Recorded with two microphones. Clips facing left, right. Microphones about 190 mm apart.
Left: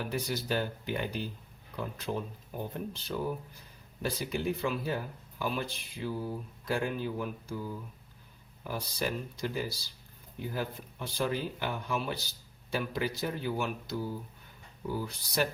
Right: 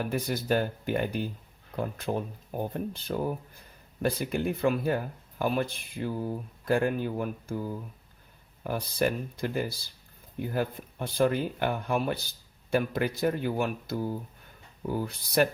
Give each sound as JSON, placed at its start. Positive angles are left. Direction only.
{"t": 0.0, "sound": "speech", "side_deg": -50}
{"t": 8.6, "sound": "speech", "side_deg": -55}